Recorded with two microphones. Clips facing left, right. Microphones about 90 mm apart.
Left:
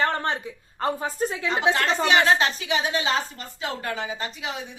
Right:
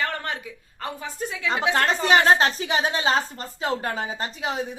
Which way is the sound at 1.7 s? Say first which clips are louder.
Right 5 dB; 45° right (ahead or behind).